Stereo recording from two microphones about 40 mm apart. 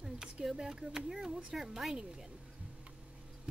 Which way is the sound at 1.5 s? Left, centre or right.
Centre.